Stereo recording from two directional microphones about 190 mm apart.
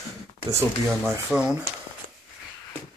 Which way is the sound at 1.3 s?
5° right (ahead or behind).